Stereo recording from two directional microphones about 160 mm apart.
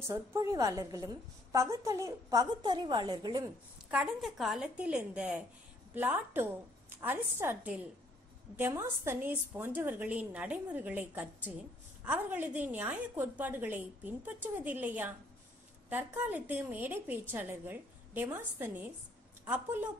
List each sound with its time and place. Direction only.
0.1 s a woman's voice: 20° right (ahead or behind)
3.9 s a woman's voice: 5° right (ahead or behind)